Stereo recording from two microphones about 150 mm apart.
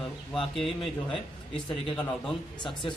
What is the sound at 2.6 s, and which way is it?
Speech, 30° left (ahead or behind).